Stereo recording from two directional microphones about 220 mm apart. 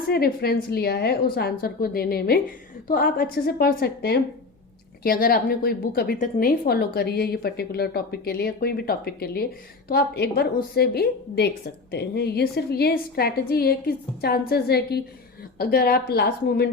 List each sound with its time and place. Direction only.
0.1 s a woman's voice: 45° left (ahead or behind)